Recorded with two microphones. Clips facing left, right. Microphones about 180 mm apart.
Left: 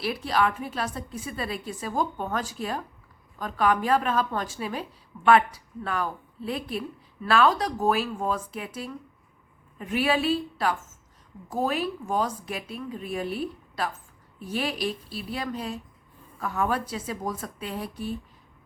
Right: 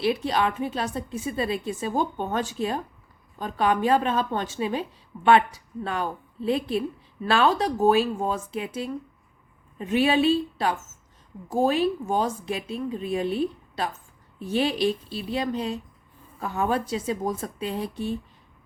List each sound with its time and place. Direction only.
0.0 s a woman's voice: 25° right (ahead or behind)